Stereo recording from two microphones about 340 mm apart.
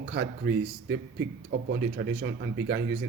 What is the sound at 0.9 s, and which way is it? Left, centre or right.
Speech, right.